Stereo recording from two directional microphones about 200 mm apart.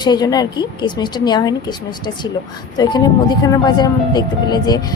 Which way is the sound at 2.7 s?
20° left (ahead or behind).